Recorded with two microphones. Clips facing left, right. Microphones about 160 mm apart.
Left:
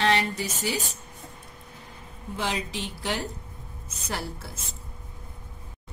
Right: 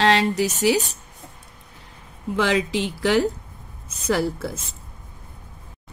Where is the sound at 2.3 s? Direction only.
90° right.